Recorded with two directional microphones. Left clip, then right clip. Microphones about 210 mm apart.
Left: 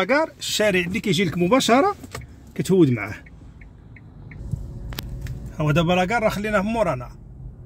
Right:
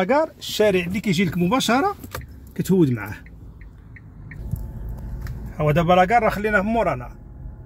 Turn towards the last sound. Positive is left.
turn(degrees=15)  # may be behind; listen again after turning